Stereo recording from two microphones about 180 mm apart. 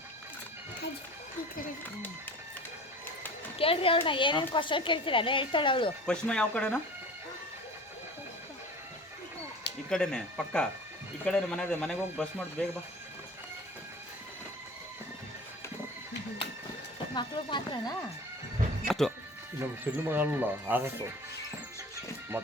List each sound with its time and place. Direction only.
3.6 s a woman's voice: 30° left (ahead or behind)
6.1 s speech: 5° left (ahead or behind)
9.9 s speech: 5° left (ahead or behind)
17.2 s a woman's voice: 25° left (ahead or behind)
18.9 s speech: centre (ahead or behind)
19.5 s speech: 10° right (ahead or behind)